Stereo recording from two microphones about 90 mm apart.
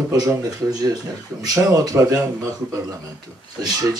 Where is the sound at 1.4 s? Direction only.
40° right (ahead or behind).